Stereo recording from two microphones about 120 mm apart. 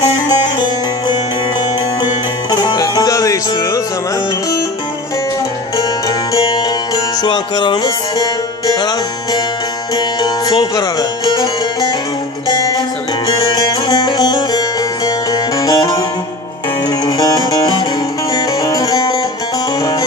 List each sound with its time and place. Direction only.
2.5 s music: 35° left (ahead or behind)
5.7 s music: 30° left (ahead or behind)
13.2 s music: 35° left (ahead or behind)